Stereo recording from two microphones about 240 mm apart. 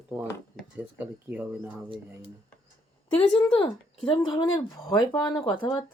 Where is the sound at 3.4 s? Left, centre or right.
Centre.